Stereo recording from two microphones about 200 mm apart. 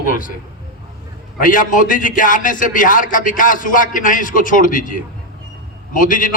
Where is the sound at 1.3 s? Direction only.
45° left (ahead or behind).